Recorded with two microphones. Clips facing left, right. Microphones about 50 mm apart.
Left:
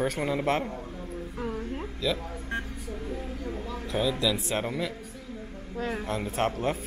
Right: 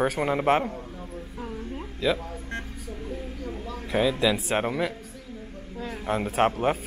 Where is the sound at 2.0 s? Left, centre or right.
Centre.